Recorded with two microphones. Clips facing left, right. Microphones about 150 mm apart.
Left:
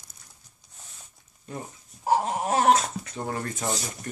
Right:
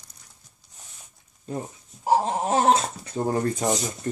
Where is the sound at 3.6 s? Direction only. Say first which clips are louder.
Right 6 dB; 20° right (ahead or behind).